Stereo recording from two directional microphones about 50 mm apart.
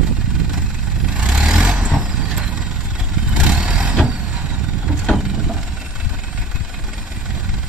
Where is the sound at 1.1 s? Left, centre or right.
Right.